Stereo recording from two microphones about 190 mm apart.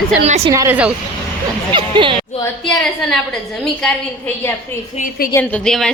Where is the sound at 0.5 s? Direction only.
15° right (ahead or behind).